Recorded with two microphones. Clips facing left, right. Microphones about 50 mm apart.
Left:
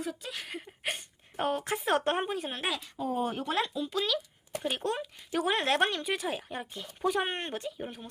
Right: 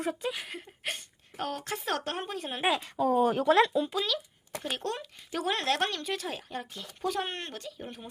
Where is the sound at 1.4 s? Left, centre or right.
Left.